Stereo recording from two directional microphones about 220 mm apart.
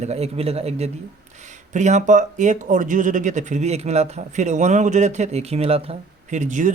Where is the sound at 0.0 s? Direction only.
30° right (ahead or behind).